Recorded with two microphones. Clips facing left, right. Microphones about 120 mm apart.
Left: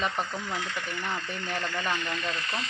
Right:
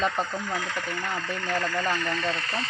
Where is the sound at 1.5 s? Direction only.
40° right (ahead or behind).